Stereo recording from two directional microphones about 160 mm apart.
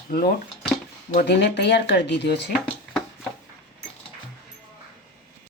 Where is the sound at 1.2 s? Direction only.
90° left.